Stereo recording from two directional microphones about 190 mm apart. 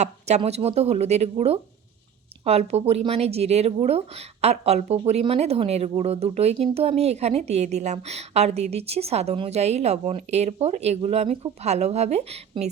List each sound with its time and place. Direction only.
0.0 s speech: 35° right (ahead or behind)